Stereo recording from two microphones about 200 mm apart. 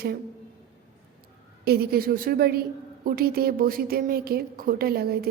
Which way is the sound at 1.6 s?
50° right (ahead or behind).